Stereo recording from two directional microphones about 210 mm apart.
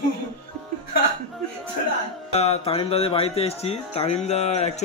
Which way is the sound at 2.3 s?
30° left (ahead or behind).